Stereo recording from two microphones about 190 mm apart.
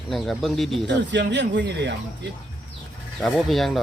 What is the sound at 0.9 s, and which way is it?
Speech, 65° right (ahead or behind).